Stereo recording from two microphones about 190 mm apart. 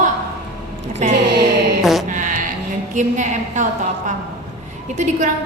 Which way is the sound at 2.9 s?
40° right (ahead or behind).